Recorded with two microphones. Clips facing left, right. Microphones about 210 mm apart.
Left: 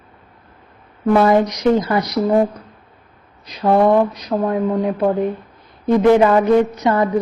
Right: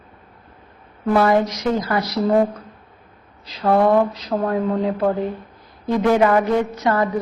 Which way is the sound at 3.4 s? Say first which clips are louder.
Left 2 dB; 20° left (ahead or behind).